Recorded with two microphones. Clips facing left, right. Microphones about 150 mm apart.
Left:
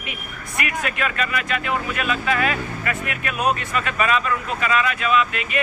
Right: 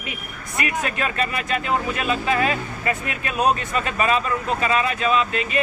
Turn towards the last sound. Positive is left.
turn(degrees=-30)  # may be behind; listen again after turning